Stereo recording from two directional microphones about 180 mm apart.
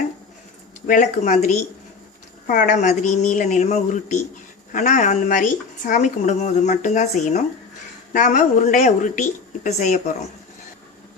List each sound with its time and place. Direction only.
0.9 s a woman's voice: 45° left (ahead or behind)